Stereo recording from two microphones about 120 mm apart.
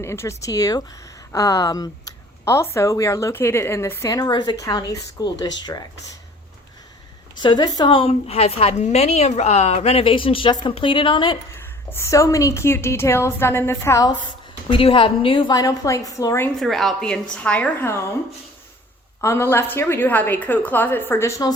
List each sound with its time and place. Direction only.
0.0 s a woman's voice: 20° left (ahead or behind)
4.1 s speech: 35° left (ahead or behind)
7.4 s a woman's voice: 40° left (ahead or behind)
11.5 s a woman's voice: 20° left (ahead or behind)
14.7 s a woman's voice: 45° left (ahead or behind)
15.5 s a woman's voice: 30° left (ahead or behind)
16.6 s a woman's voice: centre (ahead or behind)
19.2 s a woman's voice: 20° left (ahead or behind)